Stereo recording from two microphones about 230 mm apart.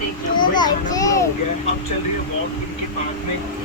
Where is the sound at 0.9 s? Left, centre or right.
Centre.